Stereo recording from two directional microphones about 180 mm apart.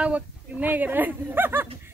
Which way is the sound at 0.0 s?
10° right (ahead or behind).